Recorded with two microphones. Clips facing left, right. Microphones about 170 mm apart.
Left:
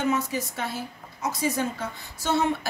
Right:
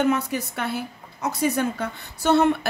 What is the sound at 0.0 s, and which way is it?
A woman's voice, 60° right (ahead or behind).